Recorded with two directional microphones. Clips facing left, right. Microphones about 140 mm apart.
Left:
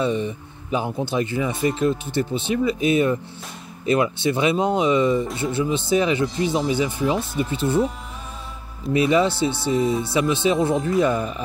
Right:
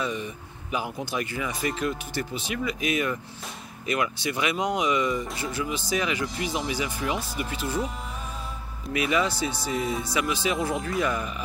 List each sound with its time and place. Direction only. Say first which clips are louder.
0.0 s speech: left 8 dB; 30° left (ahead or behind)
8.9 s speech: left 7 dB; 30° left (ahead or behind)